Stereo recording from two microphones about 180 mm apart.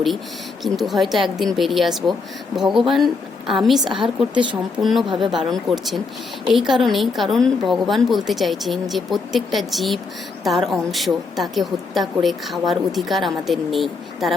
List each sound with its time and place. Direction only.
0.6 s a woman's voice: centre (ahead or behind)
4.0 s a woman's voice: 25° right (ahead or behind)
4.8 s a woman's voice: centre (ahead or behind)
5.0 s a woman's voice: 25° right (ahead or behind)
5.3 s a woman's voice: centre (ahead or behind)